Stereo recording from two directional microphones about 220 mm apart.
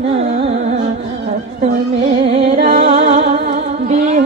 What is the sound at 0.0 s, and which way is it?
Music, 30° right (ahead or behind).